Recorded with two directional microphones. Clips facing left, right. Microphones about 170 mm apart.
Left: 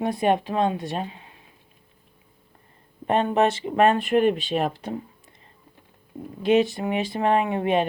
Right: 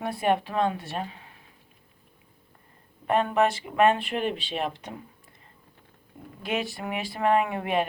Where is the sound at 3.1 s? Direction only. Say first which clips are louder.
Left 2 dB; 25° left (ahead or behind).